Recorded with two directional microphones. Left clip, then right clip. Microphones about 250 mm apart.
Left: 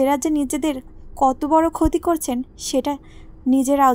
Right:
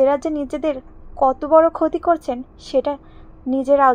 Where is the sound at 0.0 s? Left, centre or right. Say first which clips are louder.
Right 2 dB; left.